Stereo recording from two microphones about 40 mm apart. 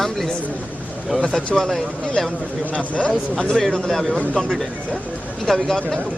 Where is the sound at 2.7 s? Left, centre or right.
Left.